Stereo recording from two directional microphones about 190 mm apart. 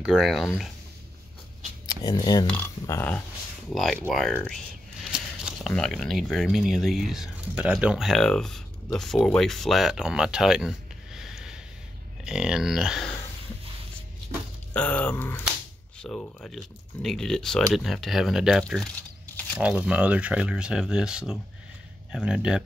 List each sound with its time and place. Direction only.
0.0 s speech: 5° right (ahead or behind)
1.9 s speech: 20° left (ahead or behind)
2.5 s speech: 10° left (ahead or behind)
5.7 s speech: 5° left (ahead or behind)
11.1 s sniff: centre (ahead or behind)
12.3 s speech: 5° right (ahead or behind)
14.7 s speech: 5° left (ahead or behind)
19.6 s speech: 5° right (ahead or behind)